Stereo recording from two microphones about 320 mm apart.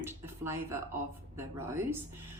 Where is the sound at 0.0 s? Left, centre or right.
Centre.